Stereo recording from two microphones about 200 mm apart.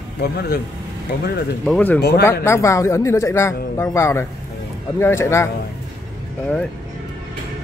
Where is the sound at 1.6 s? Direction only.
5° left (ahead or behind).